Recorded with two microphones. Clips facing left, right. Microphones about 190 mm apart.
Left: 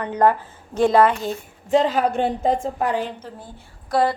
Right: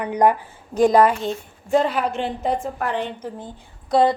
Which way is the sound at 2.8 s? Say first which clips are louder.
Left 2 dB; 5° left (ahead or behind).